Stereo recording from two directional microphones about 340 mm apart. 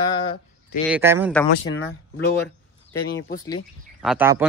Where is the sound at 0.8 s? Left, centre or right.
Centre.